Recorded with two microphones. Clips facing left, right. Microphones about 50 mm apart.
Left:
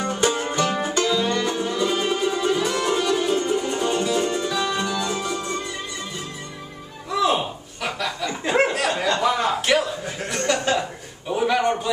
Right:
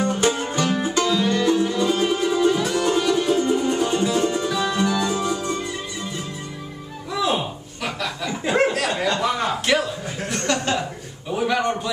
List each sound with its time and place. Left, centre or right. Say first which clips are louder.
0.0 s music: right 1 dB; centre
7.1 s chuckle: left 2 dB; centre
11.2 s a sound: left 1 dB; centre